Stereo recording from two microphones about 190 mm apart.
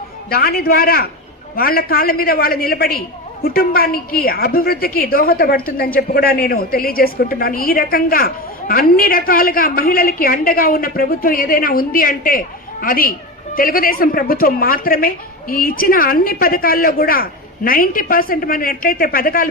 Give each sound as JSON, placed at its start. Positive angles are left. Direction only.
{"t": 0.3, "sound": "a woman's voice", "side_deg": 55}